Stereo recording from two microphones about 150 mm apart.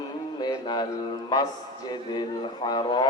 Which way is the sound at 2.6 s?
30° left (ahead or behind).